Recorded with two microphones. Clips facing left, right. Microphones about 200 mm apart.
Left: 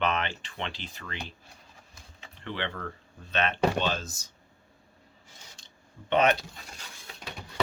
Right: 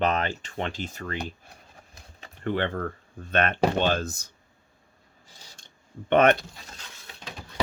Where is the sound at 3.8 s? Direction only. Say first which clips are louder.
Right 5 dB; 55° right (ahead or behind).